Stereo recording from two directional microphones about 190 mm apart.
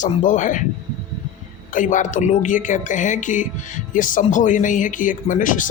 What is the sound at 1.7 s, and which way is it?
A woman's voice, 45° left (ahead or behind).